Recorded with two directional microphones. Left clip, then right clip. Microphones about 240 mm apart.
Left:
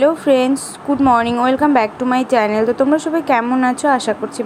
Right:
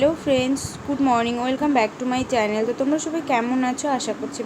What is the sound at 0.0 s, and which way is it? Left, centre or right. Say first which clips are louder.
A woman's voice: left 7 dB; centre.